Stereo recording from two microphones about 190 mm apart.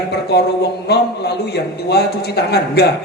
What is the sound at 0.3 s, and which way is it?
A man's voice, 60° left (ahead or behind).